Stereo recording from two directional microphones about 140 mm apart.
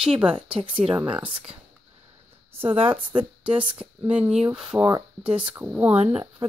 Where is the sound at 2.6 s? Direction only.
45° right (ahead or behind).